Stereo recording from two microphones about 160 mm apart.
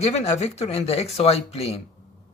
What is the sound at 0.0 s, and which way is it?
Speech, 40° left (ahead or behind).